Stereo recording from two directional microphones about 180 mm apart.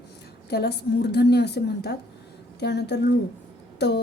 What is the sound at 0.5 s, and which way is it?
A woman's voice, 65° left (ahead or behind).